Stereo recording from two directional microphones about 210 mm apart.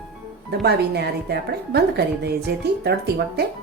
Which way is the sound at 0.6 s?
50° right (ahead or behind).